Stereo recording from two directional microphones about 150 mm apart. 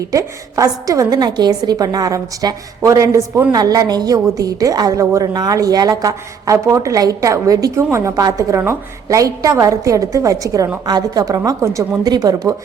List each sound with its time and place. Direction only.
0.1 s a woman's voice: 20° right (ahead or behind)